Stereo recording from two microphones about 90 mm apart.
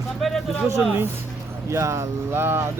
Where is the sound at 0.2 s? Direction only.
Centre (ahead or behind).